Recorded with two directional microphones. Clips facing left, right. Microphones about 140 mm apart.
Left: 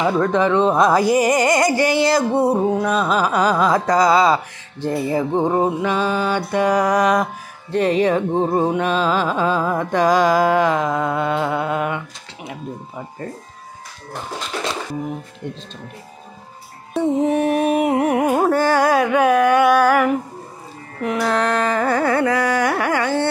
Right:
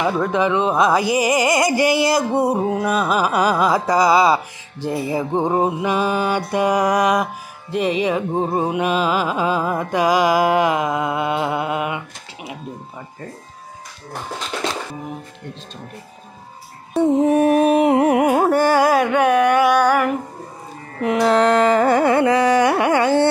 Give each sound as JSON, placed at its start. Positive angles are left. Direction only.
{"t": 0.0, "sound": "music", "side_deg": -5}
{"t": 17.0, "sound": "carnatic music", "side_deg": 0}
{"t": 17.8, "sound": "carnatic music", "side_deg": -25}
{"t": 18.2, "sound": "carnatic music", "side_deg": -10}
{"t": 21.0, "sound": "carnatic music", "side_deg": -20}